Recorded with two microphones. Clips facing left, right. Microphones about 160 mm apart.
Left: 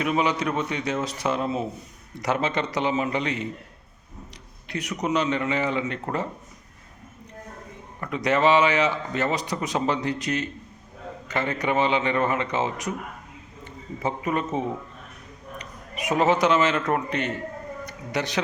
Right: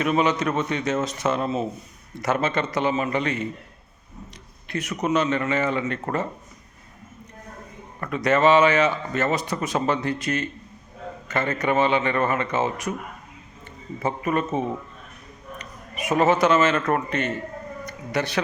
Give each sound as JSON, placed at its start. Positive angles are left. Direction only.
{"t": 0.0, "sound": "a man's voice", "side_deg": 10}
{"t": 4.7, "sound": "a man's voice", "side_deg": 15}
{"t": 8.0, "sound": "a man's voice", "side_deg": 15}
{"t": 14.0, "sound": "a man's voice", "side_deg": 15}